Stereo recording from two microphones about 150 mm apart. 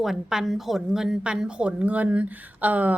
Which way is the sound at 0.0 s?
Centre (ahead or behind).